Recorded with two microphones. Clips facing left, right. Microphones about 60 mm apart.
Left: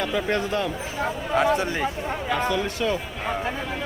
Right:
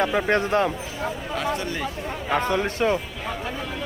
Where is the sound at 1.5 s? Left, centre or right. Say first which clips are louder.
Left 4 dB; left.